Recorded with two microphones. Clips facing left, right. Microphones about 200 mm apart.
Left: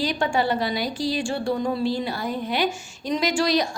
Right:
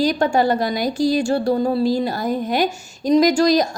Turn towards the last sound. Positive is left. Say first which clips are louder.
# right 7 dB
turn(degrees=-40)  # may be behind; listen again after turning